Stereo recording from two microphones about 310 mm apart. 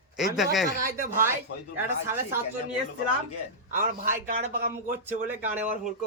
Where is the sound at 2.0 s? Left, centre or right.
Centre.